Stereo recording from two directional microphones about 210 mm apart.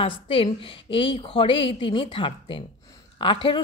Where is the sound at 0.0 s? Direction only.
25° left (ahead or behind).